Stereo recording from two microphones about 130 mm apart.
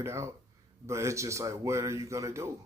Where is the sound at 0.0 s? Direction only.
20° right (ahead or behind).